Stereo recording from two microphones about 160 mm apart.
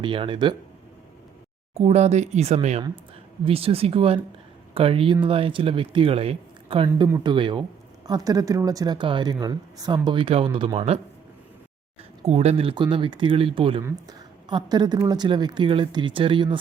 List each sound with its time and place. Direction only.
0.0 s speech: 30° right (ahead or behind)
1.7 s speech: 45° right (ahead or behind)
6.8 s a woman's voice: 25° right (ahead or behind)
12.2 s speech: 40° right (ahead or behind)
13.8 s a woman's voice: 25° right (ahead or behind)